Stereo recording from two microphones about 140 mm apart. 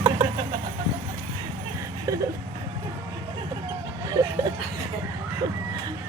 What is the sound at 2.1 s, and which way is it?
Whimper, 25° right (ahead or behind).